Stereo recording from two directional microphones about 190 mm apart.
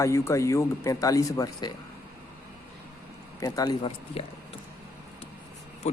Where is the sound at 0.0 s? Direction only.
15° left (ahead or behind).